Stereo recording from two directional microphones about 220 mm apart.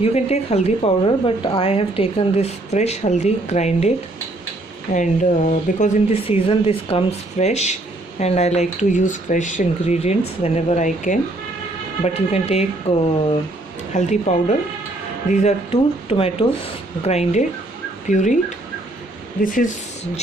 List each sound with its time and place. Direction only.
0.0 s a woman's voice: 30° left (ahead or behind)
19.4 s speech: 40° left (ahead or behind)